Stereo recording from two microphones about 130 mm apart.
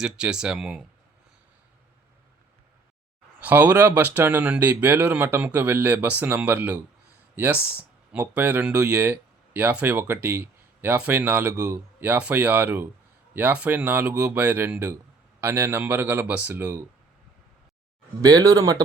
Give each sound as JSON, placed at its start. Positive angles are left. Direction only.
{"t": 0.0, "sound": "speech", "side_deg": -5}
{"t": 3.4, "sound": "speech", "side_deg": -10}
{"t": 18.2, "sound": "speech", "side_deg": -30}